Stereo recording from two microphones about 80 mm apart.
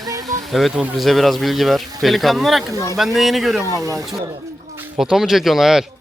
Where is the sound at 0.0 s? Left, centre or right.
Right.